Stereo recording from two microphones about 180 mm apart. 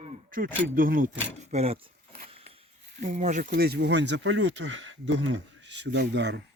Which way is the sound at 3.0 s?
40° right (ahead or behind).